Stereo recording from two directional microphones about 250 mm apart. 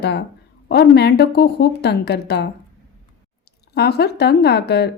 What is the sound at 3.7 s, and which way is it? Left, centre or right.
Speech, left.